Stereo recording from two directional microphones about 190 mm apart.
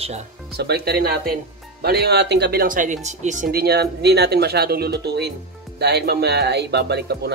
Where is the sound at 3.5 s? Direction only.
55° right (ahead or behind).